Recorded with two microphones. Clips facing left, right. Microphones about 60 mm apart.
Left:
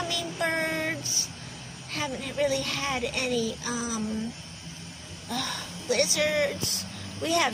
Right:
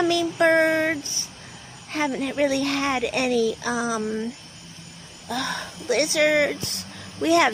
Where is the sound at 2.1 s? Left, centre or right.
Right.